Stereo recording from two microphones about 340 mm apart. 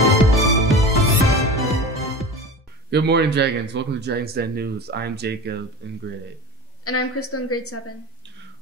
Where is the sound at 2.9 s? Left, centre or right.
Right.